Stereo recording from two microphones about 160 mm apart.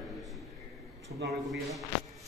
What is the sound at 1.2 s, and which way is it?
Speech, 90° right.